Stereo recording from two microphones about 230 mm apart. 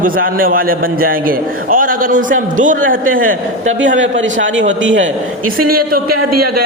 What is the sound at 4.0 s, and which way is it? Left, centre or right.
Speech, right.